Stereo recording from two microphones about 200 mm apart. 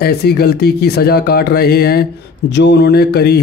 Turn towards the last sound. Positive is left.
turn(degrees=55)  # may be behind; listen again after turning